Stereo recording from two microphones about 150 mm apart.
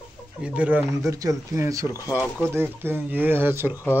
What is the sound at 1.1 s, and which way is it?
Speech, 25° right (ahead or behind).